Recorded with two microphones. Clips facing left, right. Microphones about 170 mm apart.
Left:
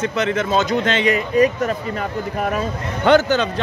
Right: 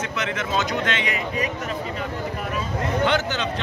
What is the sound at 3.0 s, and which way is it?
Speech, 45° left (ahead or behind).